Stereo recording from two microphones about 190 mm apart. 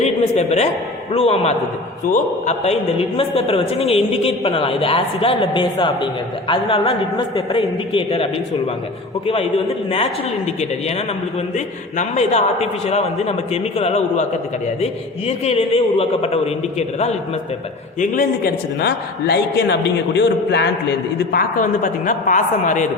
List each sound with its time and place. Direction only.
0.0 s a man's voice: 35° left (ahead or behind)
11.5 s a man's voice: 40° left (ahead or behind)
15.3 s a man's voice: 35° left (ahead or behind)
18.0 s a man's voice: 45° left (ahead or behind); by 20.7 s 65° left (ahead or behind)
21.3 s a woman's voice: 45° left (ahead or behind)